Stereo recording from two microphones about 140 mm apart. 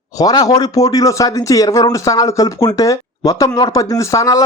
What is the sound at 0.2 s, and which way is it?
Speech, 25° left (ahead or behind).